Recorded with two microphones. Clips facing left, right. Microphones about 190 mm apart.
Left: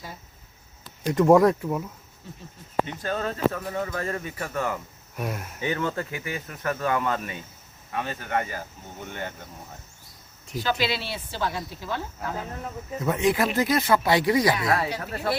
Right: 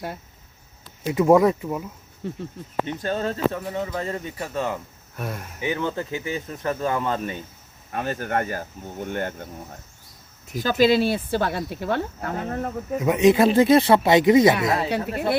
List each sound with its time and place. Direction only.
1.0 s speech: 5° right (ahead or behind)
2.2 s speech: 65° right (ahead or behind)
3.0 s speech: 25° right (ahead or behind)
5.1 s speech: 10° left (ahead or behind)
5.5 s speech: 15° right (ahead or behind); by 7.4 s 35° right (ahead or behind)
7.9 s speech: 45° right (ahead or behind)
10.5 s speech: 45° right (ahead or behind); by 12.7 s 60° right (ahead or behind)
13.0 s speech: 15° right (ahead or behind)